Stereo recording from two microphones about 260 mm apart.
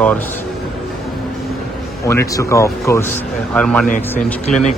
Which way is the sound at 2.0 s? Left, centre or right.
Centre.